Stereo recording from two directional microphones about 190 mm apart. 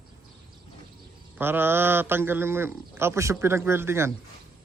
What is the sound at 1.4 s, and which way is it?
A man's voice, 10° right (ahead or behind).